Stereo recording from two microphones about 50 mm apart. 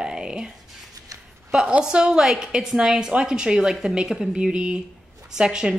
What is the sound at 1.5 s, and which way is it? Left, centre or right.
A woman's voice, centre.